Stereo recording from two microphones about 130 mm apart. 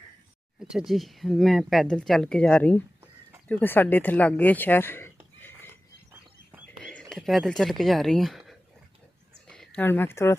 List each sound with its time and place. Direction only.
0.6 s speech: 5° right (ahead or behind); by 5.7 s 15° left (ahead or behind)
6.8 s speech: 5° left (ahead or behind)